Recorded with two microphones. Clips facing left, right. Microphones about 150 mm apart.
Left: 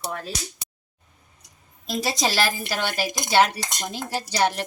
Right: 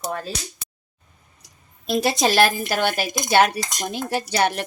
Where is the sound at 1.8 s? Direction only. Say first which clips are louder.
Right 5 dB; 60° right (ahead or behind).